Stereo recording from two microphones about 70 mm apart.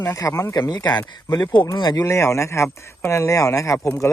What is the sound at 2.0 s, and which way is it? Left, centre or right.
Speech, left.